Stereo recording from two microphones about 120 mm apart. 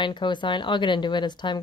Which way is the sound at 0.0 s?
40° left (ahead or behind).